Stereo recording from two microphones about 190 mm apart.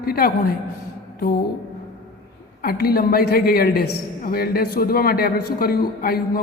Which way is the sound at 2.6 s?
50° left (ahead or behind).